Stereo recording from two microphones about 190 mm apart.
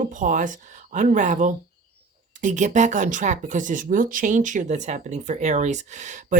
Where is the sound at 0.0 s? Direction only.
40° right (ahead or behind).